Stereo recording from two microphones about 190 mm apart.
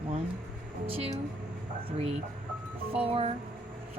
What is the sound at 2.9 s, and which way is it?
Speech, 30° right (ahead or behind).